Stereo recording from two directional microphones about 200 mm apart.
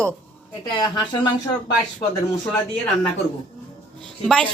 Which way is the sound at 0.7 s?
20° left (ahead or behind).